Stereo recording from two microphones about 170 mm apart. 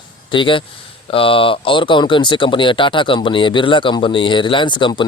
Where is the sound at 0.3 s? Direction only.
30° left (ahead or behind).